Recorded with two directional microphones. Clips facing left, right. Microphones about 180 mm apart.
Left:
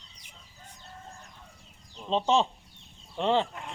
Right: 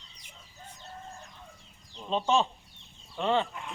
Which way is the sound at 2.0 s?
25° left (ahead or behind).